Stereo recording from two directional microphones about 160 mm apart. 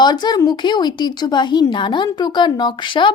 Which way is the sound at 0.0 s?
25° left (ahead or behind).